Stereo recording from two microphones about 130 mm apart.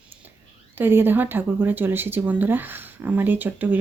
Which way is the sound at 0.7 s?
15° right (ahead or behind).